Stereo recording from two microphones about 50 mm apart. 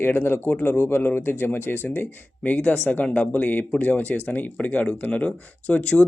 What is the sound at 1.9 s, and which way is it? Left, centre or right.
Speech, left.